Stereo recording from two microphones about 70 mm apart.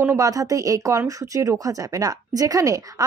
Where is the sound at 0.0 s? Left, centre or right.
Right.